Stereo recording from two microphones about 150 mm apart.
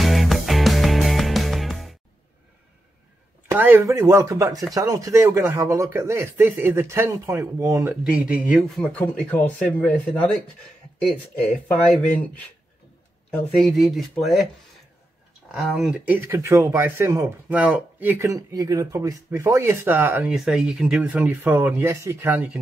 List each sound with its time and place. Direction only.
0.0 s music: centre (ahead or behind)
3.4 s speech: 15° right (ahead or behind)
8.0 s speech: 10° right (ahead or behind)
15.5 s speech: centre (ahead or behind)